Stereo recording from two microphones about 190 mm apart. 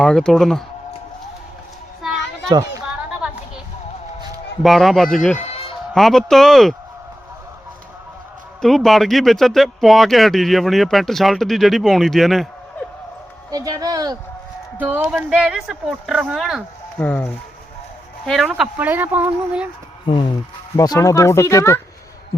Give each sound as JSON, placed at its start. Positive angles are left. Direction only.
{"t": 0.0, "sound": "speech", "side_deg": 5}
{"t": 2.5, "sound": "a child's voice", "side_deg": -15}
{"t": 3.1, "sound": "a sound", "side_deg": -5}
{"t": 4.6, "sound": "speech", "side_deg": 0}
{"t": 5.4, "sound": "music", "side_deg": 30}
{"t": 5.9, "sound": "speech", "side_deg": 0}
{"t": 8.6, "sound": "speech", "side_deg": 0}
{"t": 13.5, "sound": "speech", "side_deg": -20}
{"t": 20.1, "sound": "speech", "side_deg": 25}